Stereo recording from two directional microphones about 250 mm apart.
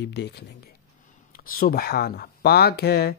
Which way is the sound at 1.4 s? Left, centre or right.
Left.